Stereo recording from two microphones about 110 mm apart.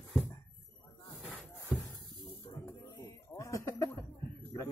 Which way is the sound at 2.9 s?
30° left (ahead or behind).